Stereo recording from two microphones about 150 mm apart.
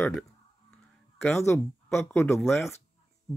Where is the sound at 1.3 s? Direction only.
15° left (ahead or behind).